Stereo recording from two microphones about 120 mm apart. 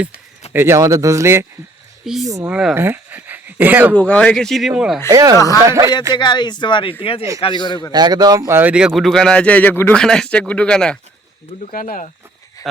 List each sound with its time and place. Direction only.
0.5 s speech: 20° right (ahead or behind)
2.5 s speech: 5° right (ahead or behind)
2.7 s speech: 20° right (ahead or behind)
3.9 s speech: 10° left (ahead or behind); by 4.9 s 5° right (ahead or behind)
5.0 s speech: 30° right (ahead or behind)
6.1 s speech: 40° left (ahead or behind)
7.0 s speech: 50° left (ahead or behind)
7.4 s speech: 40° left (ahead or behind)
7.9 s speech: 35° right (ahead or behind)
8.5 s speech: 10° right (ahead or behind); by 10.0 s 15° left (ahead or behind)
10.0 s speech: 5° left (ahead or behind)